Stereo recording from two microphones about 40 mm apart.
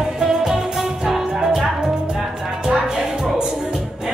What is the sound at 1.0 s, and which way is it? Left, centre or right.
Music, centre.